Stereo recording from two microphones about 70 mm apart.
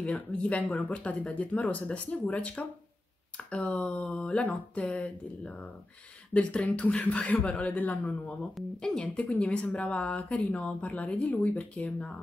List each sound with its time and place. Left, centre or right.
0.0 s speech: centre
3.6 s speech: centre
8.1 s speech: centre